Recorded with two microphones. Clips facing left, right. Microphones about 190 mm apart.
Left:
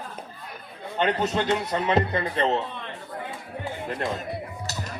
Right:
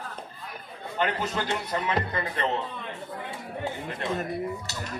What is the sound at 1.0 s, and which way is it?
A man's voice, 25° left (ahead or behind).